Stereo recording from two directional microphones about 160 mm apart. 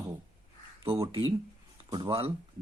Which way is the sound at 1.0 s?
35° right (ahead or behind).